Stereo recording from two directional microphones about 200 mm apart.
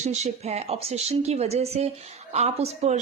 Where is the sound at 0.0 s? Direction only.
35° right (ahead or behind).